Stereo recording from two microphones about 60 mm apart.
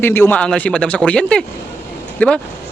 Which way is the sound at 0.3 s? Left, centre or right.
Left.